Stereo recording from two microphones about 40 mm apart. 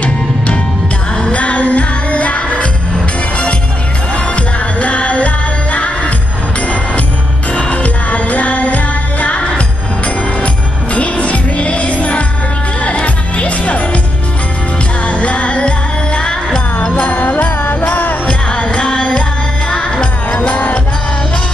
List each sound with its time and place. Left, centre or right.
1.3 s music: left
4.7 s music: left
7.7 s music: left
15.0 s music: left
16.9 s music: left
18.2 s music: left
20.4 s music: left